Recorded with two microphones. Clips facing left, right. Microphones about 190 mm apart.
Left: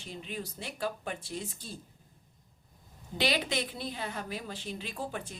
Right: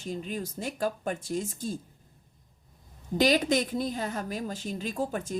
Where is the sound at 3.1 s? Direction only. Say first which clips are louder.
Right 7 dB; 45° right (ahead or behind).